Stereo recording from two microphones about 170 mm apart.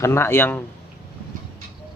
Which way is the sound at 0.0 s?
15° left (ahead or behind).